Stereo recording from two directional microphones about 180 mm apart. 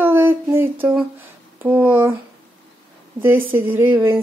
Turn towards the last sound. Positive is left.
turn(degrees=-10)  # may be behind; listen again after turning